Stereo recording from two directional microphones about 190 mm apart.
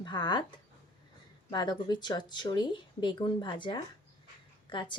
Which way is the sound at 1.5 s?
20° left (ahead or behind).